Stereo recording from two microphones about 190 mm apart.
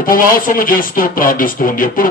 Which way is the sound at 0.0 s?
45° left (ahead or behind).